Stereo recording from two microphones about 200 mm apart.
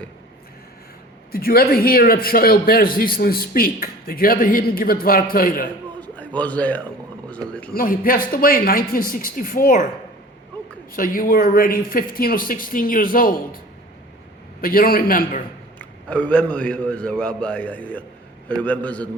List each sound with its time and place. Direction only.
1.3 s a man's voice: 50° left (ahead or behind)
6.0 s music: 5° left (ahead or behind)
7.7 s a man's voice: 45° left (ahead or behind)
10.9 s a man's voice: 45° left (ahead or behind)
14.6 s a man's voice: 45° left (ahead or behind)
15.8 s a man's voice: 5° left (ahead or behind)